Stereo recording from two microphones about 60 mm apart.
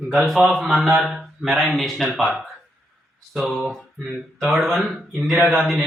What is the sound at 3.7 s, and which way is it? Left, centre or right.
Speech, centre.